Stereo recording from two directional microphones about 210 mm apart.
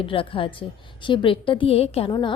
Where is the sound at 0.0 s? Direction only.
25° left (ahead or behind).